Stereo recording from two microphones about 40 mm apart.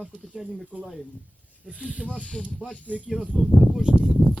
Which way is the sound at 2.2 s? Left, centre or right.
Left.